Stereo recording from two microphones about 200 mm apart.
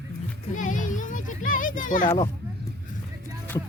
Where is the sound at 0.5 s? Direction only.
40° left (ahead or behind).